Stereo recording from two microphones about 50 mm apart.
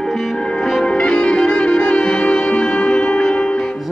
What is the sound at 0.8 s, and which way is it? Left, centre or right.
Music, centre.